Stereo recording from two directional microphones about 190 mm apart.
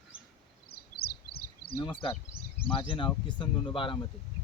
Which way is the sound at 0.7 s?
55° left (ahead or behind).